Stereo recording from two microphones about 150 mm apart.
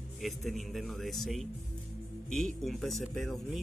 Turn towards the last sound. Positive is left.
turn(degrees=0)  # may be behind; listen again after turning